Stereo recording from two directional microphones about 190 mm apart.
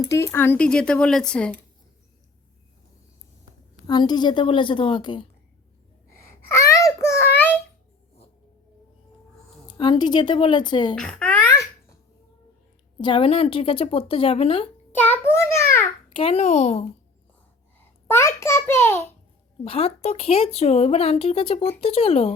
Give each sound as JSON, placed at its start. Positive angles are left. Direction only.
{"t": 0.1, "sound": "speech", "side_deg": 15}
{"t": 3.8, "sound": "speech", "side_deg": 20}
{"t": 6.6, "sound": "a sound", "side_deg": 15}
{"t": 9.6, "sound": "speech", "side_deg": 25}
{"t": 10.9, "sound": "a child's voice", "side_deg": 5}
{"t": 13.0, "sound": "speech", "side_deg": 25}
{"t": 14.9, "sound": "a sound", "side_deg": 10}
{"t": 16.1, "sound": "speech", "side_deg": 30}
{"t": 18.1, "sound": "speech", "side_deg": 15}
{"t": 19.6, "sound": "speech", "side_deg": 30}